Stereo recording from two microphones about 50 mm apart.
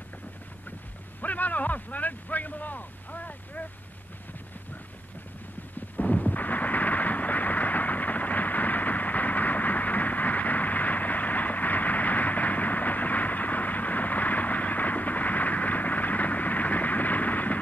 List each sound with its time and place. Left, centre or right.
1.2 s speech: left
5.9 s artillery fire: left